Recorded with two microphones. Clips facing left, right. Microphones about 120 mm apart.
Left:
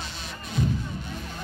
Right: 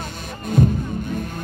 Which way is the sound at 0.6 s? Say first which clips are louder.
Right 9 dB; 50° right (ahead or behind).